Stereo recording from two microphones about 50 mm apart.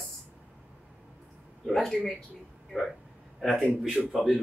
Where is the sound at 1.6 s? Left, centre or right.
Centre.